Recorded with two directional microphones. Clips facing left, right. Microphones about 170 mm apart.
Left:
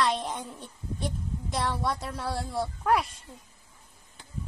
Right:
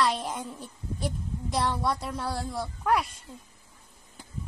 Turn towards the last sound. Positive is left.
turn(degrees=0)  # may be behind; listen again after turning